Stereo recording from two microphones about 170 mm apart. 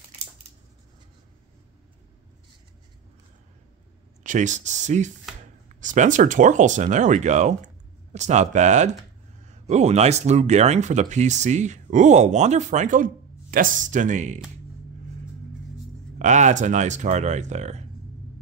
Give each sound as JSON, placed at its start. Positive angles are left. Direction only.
{"t": 4.2, "sound": "speech", "side_deg": -45}
{"t": 16.2, "sound": "speech", "side_deg": -45}